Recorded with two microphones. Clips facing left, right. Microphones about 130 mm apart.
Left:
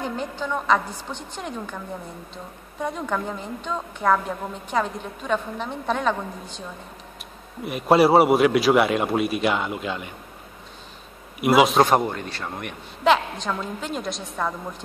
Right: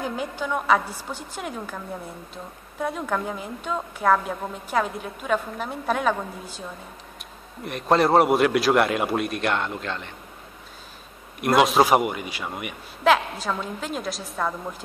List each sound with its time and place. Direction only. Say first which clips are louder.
0.0 s a woman's voice: even; 5° right (ahead or behind)
7.6 s a man's voice: left 3 dB; 5° left (ahead or behind)
11.4 s a man's voice: left 1 dB; centre (ahead or behind)